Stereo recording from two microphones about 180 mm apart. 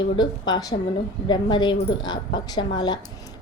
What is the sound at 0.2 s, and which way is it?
A woman's voice, 25° left (ahead or behind).